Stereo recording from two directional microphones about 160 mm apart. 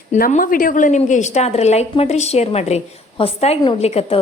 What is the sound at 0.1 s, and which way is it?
A woman's voice, 50° left (ahead or behind).